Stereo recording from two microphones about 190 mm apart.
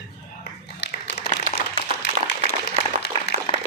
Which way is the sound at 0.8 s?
65° left (ahead or behind).